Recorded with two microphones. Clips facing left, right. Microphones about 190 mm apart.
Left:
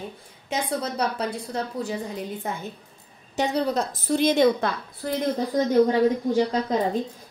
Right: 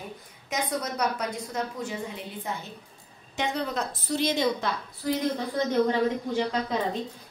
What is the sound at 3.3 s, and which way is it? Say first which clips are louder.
Speech: left 6 dB; 35° left (ahead or behind).